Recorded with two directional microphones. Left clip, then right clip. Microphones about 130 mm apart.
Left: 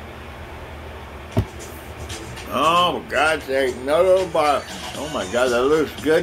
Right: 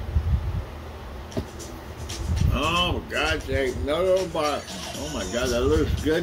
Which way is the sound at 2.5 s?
40° right (ahead or behind).